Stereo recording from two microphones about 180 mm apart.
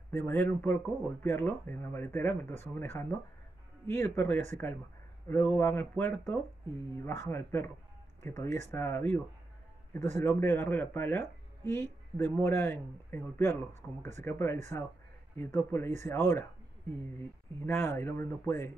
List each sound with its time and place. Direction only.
0.1 s speech: 10° left (ahead or behind)
13.7 s speech: 40° right (ahead or behind)
14.2 s speech: 15° left (ahead or behind)
17.6 s speech: 15° left (ahead or behind)